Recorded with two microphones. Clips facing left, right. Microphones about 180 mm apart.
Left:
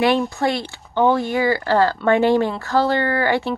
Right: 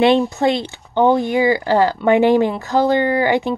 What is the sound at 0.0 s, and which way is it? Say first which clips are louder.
Speech: right 4 dB; 20° right (ahead or behind).